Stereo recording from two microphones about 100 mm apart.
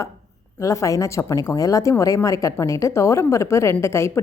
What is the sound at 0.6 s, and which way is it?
A woman's voice, 30° left (ahead or behind).